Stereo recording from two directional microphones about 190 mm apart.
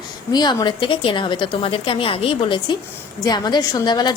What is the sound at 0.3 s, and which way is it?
A woman's voice, 20° left (ahead or behind).